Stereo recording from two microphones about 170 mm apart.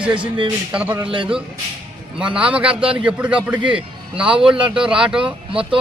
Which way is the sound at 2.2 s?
5° right (ahead or behind).